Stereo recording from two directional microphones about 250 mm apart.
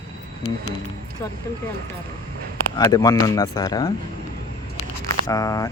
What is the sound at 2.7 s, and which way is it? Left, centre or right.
Speech, centre.